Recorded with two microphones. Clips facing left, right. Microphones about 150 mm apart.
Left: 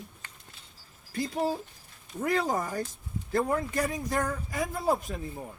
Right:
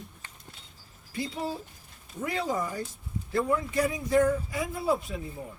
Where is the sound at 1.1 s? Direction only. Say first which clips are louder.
Left 3 dB; 45° left (ahead or behind).